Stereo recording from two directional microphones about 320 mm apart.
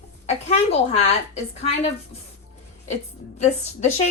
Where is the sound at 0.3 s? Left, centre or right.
Centre.